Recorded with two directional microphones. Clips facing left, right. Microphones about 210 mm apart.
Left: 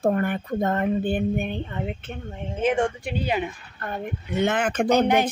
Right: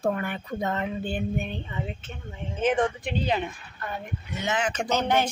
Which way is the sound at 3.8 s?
55° left (ahead or behind).